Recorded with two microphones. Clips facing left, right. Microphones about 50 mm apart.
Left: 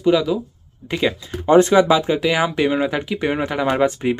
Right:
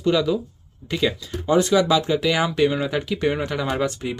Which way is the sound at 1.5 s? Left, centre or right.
Left.